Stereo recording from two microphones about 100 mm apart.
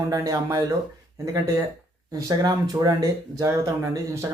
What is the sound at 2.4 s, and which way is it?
Speech, 40° right (ahead or behind).